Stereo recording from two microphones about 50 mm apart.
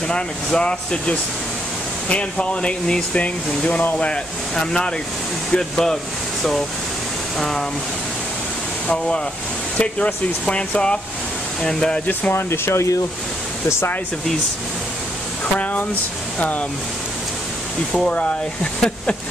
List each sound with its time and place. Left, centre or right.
0.1 s speech: centre
7.3 s speech: centre
8.8 s speech: centre
12.1 s speech: left
12.4 s speech: left
15.6 s speech: left
18.1 s speech: left